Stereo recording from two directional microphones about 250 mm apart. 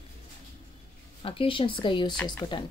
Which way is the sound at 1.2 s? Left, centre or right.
Left.